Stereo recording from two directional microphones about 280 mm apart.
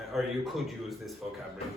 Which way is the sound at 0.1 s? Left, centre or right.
Centre.